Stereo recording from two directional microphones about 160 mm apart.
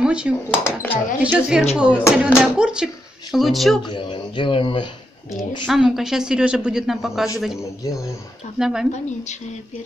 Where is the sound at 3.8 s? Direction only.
30° left (ahead or behind).